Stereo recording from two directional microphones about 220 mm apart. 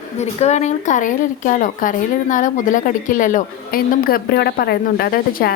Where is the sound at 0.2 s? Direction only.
30° left (ahead or behind).